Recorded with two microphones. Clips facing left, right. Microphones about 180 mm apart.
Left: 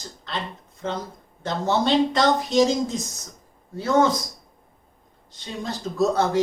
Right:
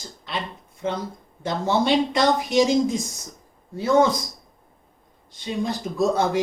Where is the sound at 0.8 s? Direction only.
15° right (ahead or behind).